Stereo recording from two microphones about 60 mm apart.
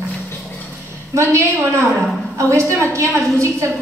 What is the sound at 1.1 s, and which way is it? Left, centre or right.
A woman's voice, right.